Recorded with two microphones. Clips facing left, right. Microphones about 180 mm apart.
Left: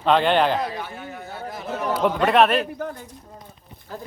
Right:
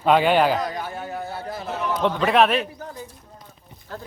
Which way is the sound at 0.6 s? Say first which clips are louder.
Right 1 dB; 40° right (ahead or behind).